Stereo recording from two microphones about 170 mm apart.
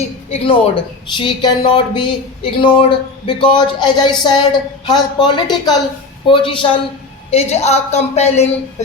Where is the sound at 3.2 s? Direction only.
25° left (ahead or behind).